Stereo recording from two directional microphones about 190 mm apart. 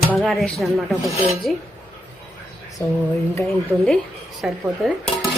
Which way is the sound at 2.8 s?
15° left (ahead or behind).